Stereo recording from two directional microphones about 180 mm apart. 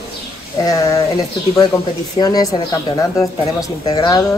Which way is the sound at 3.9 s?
25° left (ahead or behind).